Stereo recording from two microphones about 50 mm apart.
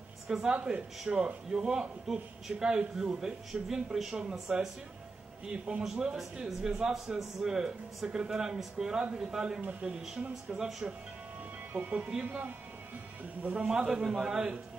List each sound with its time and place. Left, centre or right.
0.3 s a man's voice: centre
0.6 s a man's voice: right
1.0 s a man's voice: centre
9.0 s a man's voice: right
9.6 s a man's voice: right
13.6 s a man's voice: centre